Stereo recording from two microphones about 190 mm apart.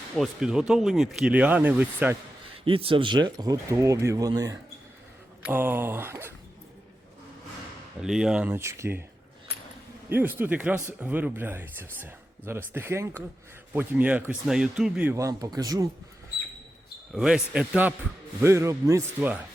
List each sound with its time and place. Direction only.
0.2 s speech: 5° right (ahead or behind)
2.6 s speech: 30° right (ahead or behind); by 6.3 s 10° right (ahead or behind)
8.0 s speech: 5° right (ahead or behind)
10.1 s speech: 10° right (ahead or behind)
17.1 s speech: 5° right (ahead or behind)